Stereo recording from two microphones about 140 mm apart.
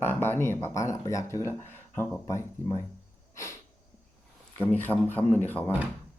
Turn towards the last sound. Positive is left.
turn(degrees=10)  # may be behind; listen again after turning